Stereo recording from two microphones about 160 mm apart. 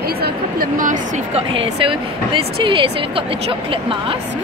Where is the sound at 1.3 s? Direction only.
35° right (ahead or behind).